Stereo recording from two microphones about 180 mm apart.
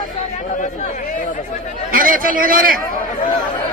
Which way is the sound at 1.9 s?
50° right (ahead or behind).